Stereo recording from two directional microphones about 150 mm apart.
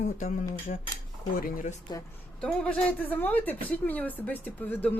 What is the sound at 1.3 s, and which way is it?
Speech, 65° left (ahead or behind).